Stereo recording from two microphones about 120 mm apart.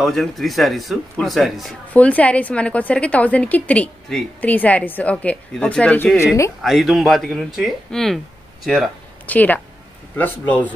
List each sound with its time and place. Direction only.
0.0 s speech: centre (ahead or behind)
2.0 s a woman's voice: 10° left (ahead or behind)
6.1 s speech: 25° left (ahead or behind)
6.6 s speech: centre (ahead or behind)
9.2 s a woman's voice: 15° left (ahead or behind)